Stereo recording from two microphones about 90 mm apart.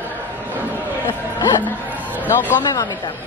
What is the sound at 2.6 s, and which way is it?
Speech, 45° left (ahead or behind).